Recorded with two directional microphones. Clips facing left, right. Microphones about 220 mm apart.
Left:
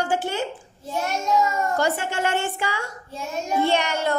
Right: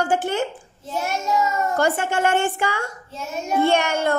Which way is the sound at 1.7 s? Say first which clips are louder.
Right 3 dB; 50° right (ahead or behind).